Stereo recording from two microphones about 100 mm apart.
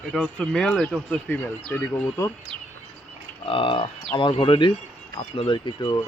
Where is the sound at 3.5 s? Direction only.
60° left (ahead or behind).